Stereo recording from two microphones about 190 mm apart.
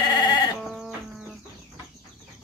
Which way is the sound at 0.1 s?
20° left (ahead or behind).